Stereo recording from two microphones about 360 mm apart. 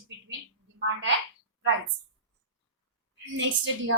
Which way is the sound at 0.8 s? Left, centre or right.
Right.